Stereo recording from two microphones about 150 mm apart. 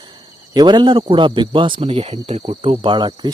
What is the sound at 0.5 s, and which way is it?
Speech, 30° right (ahead or behind).